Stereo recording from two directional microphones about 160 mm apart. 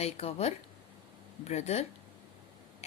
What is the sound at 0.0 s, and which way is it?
A woman's voice, 40° left (ahead or behind).